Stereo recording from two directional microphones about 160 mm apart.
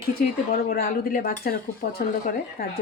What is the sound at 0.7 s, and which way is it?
Speech, 70° left (ahead or behind).